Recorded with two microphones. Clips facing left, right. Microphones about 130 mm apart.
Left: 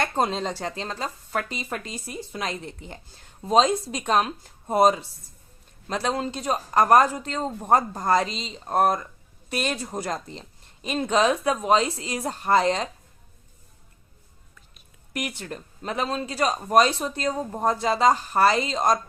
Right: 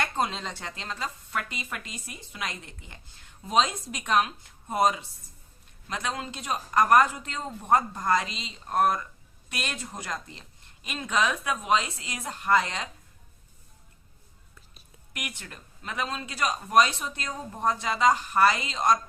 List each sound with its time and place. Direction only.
0.0 s speech: 40° left (ahead or behind)
15.1 s speech: 35° left (ahead or behind)